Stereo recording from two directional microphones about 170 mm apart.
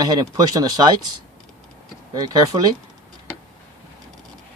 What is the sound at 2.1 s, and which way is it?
Speech, 25° right (ahead or behind).